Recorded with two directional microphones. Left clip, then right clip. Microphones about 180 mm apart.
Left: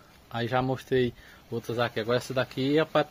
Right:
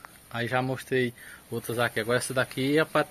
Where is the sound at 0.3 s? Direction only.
15° left (ahead or behind).